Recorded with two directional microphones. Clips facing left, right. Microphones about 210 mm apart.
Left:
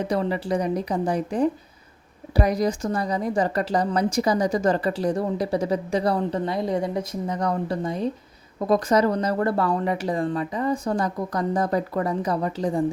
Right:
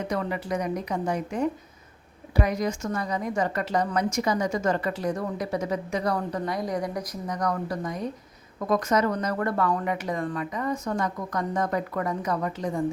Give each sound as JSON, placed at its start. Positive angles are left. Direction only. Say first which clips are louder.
{"t": 0.1, "sound": "a woman's voice", "louder": "left 4 dB", "side_deg": 30}